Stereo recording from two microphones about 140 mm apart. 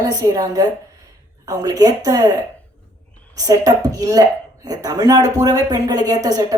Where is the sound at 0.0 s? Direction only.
25° right (ahead or behind).